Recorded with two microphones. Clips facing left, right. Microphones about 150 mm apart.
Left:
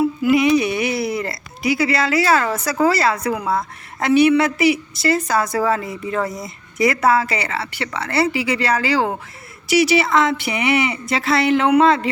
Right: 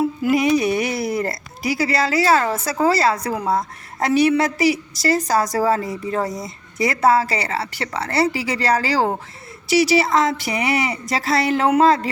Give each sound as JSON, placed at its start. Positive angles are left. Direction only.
{"t": 0.2, "sound": "a woman's voice", "side_deg": -45}